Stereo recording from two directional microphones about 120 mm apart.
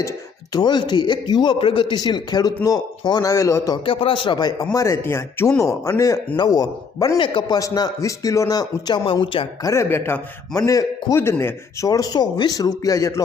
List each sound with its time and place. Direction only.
0.5 s a man's voice: 35° left (ahead or behind)
3.8 s a man's voice: 45° left (ahead or behind); by 7.2 s 30° left (ahead or behind)
7.2 s a man's voice: 40° left (ahead or behind)
9.2 s speech: 45° left (ahead or behind)
9.6 s speech: 20° left (ahead or behind)